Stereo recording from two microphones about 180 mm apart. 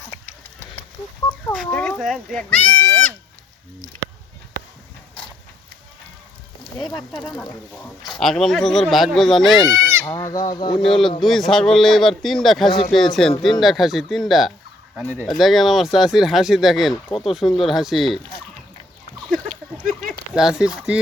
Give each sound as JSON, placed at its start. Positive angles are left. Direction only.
{"t": 1.5, "sound": "speech", "side_deg": 5}
{"t": 6.7, "sound": "speech", "side_deg": 0}
{"t": 9.6, "sound": "speech", "side_deg": -15}
{"t": 10.1, "sound": "speech", "side_deg": 20}
{"t": 10.8, "sound": "speech", "side_deg": 0}
{"t": 20.3, "sound": "speech", "side_deg": -5}